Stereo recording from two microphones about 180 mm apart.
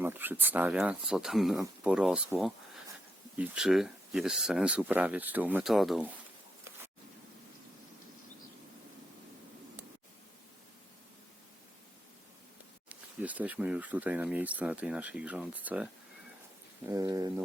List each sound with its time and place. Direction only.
0.0 s speech: 10° right (ahead or behind)
12.9 s speech: 10° right (ahead or behind)
16.8 s speech: 20° right (ahead or behind)